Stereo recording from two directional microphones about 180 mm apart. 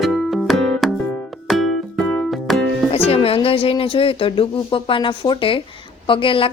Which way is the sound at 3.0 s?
30° left (ahead or behind).